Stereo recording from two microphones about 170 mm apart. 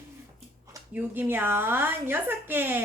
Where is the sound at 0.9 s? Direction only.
10° right (ahead or behind).